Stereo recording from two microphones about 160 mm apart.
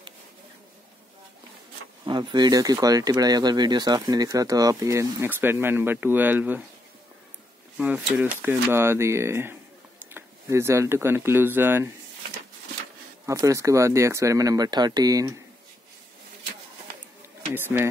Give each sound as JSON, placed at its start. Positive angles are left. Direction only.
{"t": 2.0, "sound": "speech", "side_deg": -30}
{"t": 7.7, "sound": "speech", "side_deg": -10}
{"t": 13.2, "sound": "speech", "side_deg": -20}
{"t": 17.5, "sound": "speech", "side_deg": -10}